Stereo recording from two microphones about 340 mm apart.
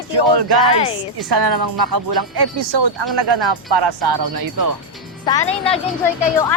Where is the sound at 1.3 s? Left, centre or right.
Right.